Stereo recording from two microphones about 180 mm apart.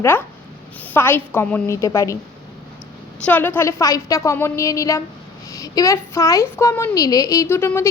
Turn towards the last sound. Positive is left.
turn(degrees=15)  # may be behind; listen again after turning